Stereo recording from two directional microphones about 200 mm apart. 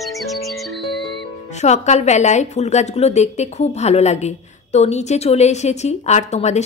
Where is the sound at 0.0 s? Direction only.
Centre (ahead or behind).